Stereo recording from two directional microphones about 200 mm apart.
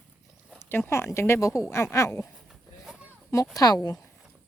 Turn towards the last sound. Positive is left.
turn(degrees=20)  # may be behind; listen again after turning